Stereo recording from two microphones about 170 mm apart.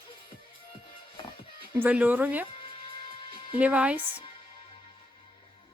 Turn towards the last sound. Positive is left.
turn(degrees=-30)  # may be behind; listen again after turning